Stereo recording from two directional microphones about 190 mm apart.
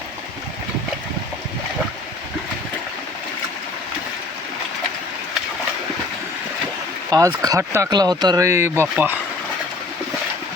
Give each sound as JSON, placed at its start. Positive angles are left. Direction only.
{"t": 7.1, "sound": "speech", "side_deg": -20}